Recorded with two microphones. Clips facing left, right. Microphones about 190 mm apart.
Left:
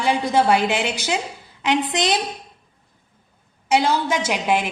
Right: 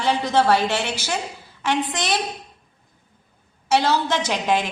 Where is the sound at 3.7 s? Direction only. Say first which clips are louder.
Left 1 dB; 15° left (ahead or behind).